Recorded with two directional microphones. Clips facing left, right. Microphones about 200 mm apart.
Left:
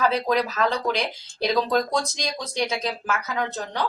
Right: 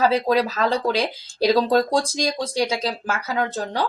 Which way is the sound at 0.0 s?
30° right (ahead or behind).